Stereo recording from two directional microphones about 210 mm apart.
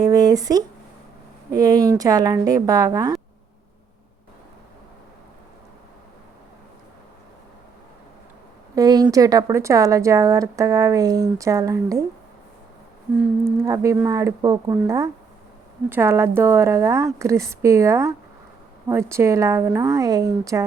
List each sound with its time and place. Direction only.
0.0 s a sound: 15° right (ahead or behind)
1.5 s speech: 15° right (ahead or behind)
8.7 s speech: 20° right (ahead or behind)
13.4 s speech: 15° right (ahead or behind)